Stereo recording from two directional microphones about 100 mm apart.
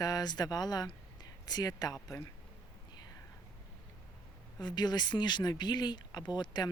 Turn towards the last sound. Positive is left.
turn(degrees=45)  # may be behind; listen again after turning